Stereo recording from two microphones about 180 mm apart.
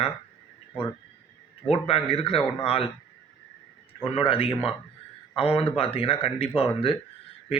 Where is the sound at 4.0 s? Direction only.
30° left (ahead or behind).